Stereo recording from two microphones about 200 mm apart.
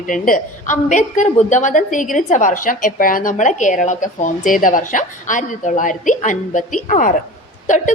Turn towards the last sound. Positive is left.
turn(degrees=40)  # may be behind; listen again after turning